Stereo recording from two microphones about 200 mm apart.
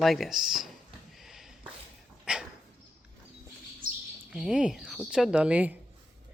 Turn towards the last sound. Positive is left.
turn(degrees=-5)  # may be behind; listen again after turning